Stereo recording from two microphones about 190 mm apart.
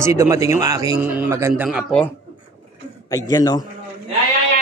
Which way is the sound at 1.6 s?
Centre (ahead or behind).